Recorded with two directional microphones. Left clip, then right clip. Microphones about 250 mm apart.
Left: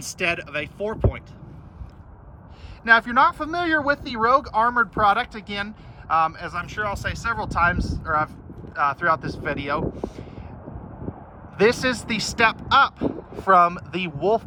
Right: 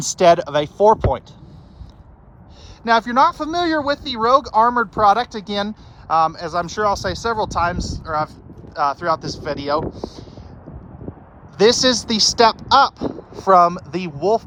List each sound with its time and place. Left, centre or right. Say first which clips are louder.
0.0 s speech: right 12 dB; centre
2.8 s speech: right 2 dB; centre
11.1 s a sound: right 1 dB; left
11.5 s speech: right 5 dB; centre